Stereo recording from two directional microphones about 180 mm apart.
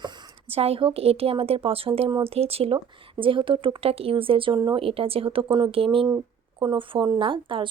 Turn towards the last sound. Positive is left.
turn(degrees=-30)  # may be behind; listen again after turning